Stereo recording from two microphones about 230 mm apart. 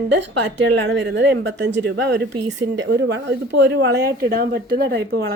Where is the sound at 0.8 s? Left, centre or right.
Right.